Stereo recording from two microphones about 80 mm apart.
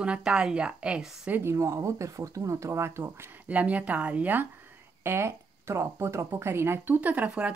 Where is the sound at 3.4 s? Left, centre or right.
Centre.